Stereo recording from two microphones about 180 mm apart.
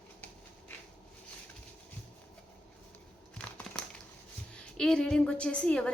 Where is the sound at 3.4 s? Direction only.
5° left (ahead or behind).